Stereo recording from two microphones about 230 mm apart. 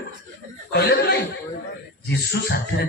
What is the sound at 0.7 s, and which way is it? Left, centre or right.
Speech, left.